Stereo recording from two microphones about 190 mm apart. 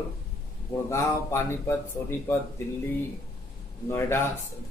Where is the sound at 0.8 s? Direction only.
15° left (ahead or behind).